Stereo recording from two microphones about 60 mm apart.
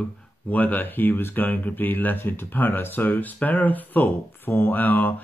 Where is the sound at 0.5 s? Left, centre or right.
Left.